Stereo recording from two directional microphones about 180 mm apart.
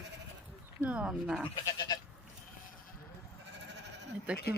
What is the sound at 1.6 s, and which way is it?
Goat, 20° left (ahead or behind).